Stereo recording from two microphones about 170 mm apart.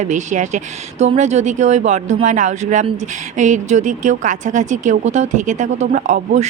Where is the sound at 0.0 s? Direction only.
45° right (ahead or behind).